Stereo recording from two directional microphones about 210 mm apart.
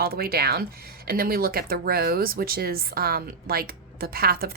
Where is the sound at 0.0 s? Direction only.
45° right (ahead or behind).